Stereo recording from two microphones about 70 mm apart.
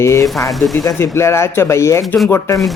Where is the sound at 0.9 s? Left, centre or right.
Left.